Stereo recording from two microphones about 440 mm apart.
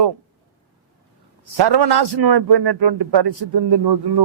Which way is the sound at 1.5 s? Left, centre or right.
Right.